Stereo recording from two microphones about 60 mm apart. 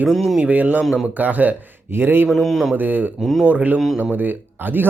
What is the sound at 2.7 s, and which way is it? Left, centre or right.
Speech, right.